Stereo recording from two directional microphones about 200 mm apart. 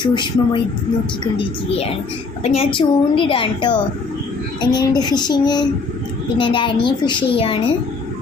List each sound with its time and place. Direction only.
0.0 s a woman's voice: 20° left (ahead or behind)
2.4 s a woman's voice: 30° left (ahead or behind)